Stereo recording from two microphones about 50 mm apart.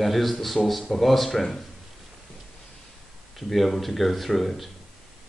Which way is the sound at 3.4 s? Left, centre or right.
Centre.